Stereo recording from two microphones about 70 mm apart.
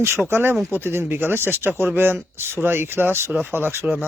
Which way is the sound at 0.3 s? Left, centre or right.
Right.